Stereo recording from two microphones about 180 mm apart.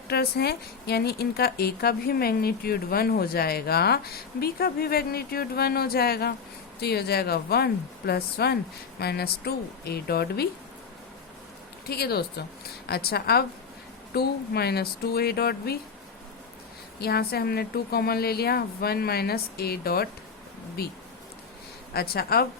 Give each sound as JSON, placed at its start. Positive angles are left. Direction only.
{"t": 0.1, "sound": "a woman's voice", "side_deg": 60}
{"t": 11.9, "sound": "a woman's voice", "side_deg": 60}
{"t": 17.0, "sound": "a woman's voice", "side_deg": 60}
{"t": 21.9, "sound": "a woman's voice", "side_deg": 60}